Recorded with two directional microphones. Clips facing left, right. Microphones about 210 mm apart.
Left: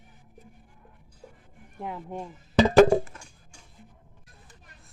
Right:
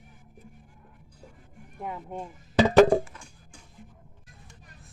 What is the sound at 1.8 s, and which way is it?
Speech, centre (ahead or behind).